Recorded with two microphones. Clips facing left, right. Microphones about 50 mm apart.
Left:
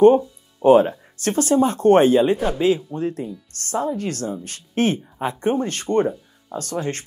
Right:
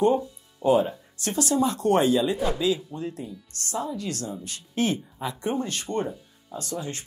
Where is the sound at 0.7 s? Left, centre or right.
Left.